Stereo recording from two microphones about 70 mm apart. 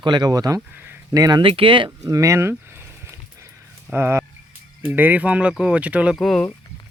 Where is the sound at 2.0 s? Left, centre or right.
Right.